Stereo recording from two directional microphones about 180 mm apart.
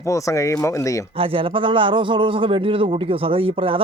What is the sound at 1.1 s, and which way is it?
A man's voice, 30° right (ahead or behind).